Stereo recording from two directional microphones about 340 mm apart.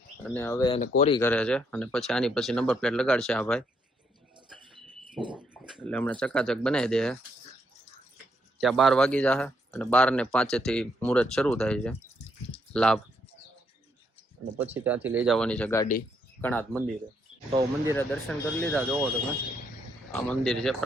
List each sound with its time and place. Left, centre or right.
0.3 s speech: centre
1.2 s speech: centre
4.4 s bird: centre
5.7 s speech: centre
8.5 s speech: centre
14.6 s speech: centre
17.5 s speech: centre
17.9 s speech: centre
20.1 s speech: centre